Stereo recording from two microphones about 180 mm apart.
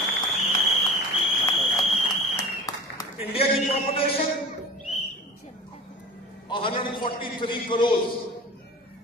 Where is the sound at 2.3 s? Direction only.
20° left (ahead or behind).